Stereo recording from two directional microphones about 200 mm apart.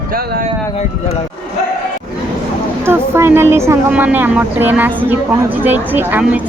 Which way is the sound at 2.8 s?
10° right (ahead or behind).